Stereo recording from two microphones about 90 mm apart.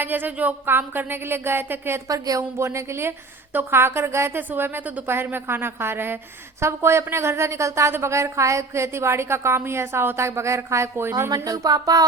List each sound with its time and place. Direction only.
0.0 s a woman's voice: 20° right (ahead or behind)
2.0 s a woman's voice: 40° right (ahead or behind)
2.4 s a woman's voice: 30° right (ahead or behind)